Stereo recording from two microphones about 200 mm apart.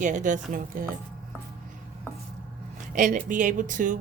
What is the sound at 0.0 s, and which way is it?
Speech, 40° right (ahead or behind).